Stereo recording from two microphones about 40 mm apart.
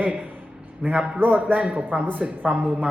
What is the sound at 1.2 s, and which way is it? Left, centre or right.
Speech, right.